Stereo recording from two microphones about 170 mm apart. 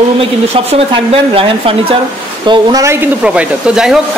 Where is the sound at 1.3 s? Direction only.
30° right (ahead or behind).